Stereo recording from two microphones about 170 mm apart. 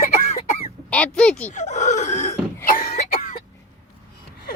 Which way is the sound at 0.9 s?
5° left (ahead or behind).